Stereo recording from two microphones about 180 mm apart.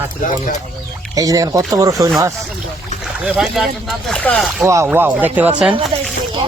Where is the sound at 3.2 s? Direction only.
5° right (ahead or behind).